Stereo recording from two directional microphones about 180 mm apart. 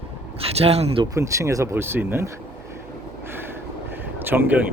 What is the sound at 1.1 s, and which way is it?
Speech, 15° right (ahead or behind).